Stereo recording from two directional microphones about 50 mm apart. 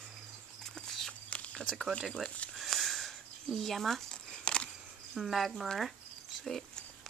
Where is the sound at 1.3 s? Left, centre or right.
Left.